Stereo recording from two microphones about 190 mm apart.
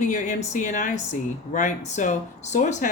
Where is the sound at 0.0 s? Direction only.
40° left (ahead or behind).